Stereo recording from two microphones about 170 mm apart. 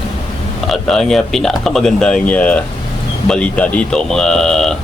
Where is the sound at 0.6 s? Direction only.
Centre (ahead or behind).